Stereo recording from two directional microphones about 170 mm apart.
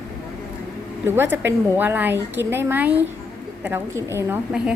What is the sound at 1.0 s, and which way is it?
A woman's voice, 15° right (ahead or behind).